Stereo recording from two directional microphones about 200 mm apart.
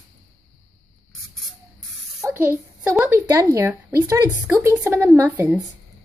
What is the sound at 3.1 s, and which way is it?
Speech, 15° right (ahead or behind).